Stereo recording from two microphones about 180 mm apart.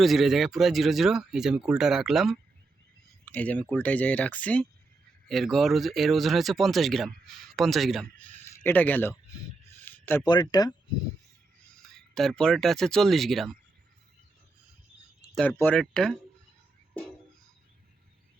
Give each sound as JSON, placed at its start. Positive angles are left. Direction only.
{"t": 0.0, "sound": "speech", "side_deg": 0}
{"t": 8.4, "sound": "speech", "side_deg": 10}
{"t": 9.8, "sound": "a sound", "side_deg": 10}
{"t": 10.2, "sound": "speech", "side_deg": 20}
{"t": 12.1, "sound": "speech", "side_deg": 5}
{"t": 15.4, "sound": "speech", "side_deg": 10}